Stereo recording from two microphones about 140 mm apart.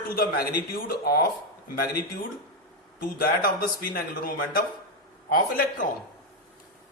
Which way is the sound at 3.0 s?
90° left.